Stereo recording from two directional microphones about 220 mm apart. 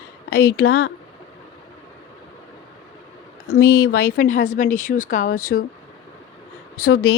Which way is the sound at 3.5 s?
45° left (ahead or behind).